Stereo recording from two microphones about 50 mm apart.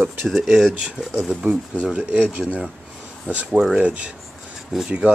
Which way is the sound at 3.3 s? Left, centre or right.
Right.